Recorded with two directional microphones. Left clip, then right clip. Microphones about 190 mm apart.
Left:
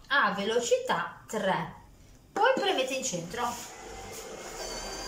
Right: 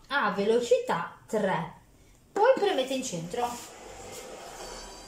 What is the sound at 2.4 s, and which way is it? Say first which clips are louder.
Speech: right 2 dB; 25° right (ahead or behind).